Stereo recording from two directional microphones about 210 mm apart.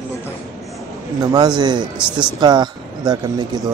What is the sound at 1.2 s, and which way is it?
Speech, 20° right (ahead or behind).